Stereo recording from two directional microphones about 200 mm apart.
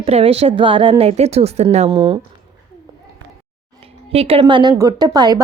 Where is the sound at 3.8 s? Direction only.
30° right (ahead or behind).